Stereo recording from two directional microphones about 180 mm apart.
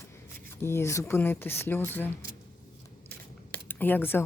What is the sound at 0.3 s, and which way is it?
Speech, 15° left (ahead or behind).